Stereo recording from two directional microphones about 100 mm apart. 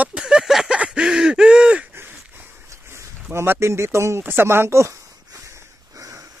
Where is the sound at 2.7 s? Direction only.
30° right (ahead or behind).